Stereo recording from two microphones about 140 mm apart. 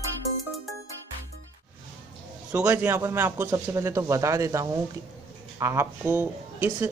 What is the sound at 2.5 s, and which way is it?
Speech, 10° right (ahead or behind).